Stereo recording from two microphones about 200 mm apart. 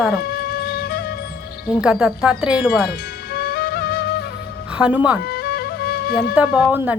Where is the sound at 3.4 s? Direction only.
50° left (ahead or behind).